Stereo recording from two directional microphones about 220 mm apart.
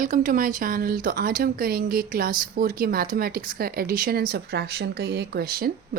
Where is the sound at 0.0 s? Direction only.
35° right (ahead or behind).